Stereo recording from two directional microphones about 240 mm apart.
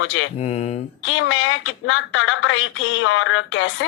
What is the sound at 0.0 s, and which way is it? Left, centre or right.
A woman's voice, left.